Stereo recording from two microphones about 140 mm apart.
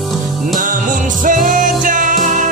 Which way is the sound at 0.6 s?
70° right (ahead or behind).